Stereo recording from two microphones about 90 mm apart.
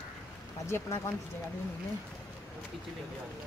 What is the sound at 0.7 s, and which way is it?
Speech, 30° left (ahead or behind).